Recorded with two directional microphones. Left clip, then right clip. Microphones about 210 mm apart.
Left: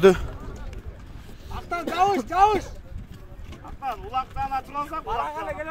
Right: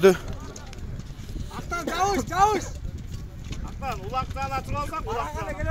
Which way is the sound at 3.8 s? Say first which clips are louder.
Left 2 dB; 45° left (ahead or behind).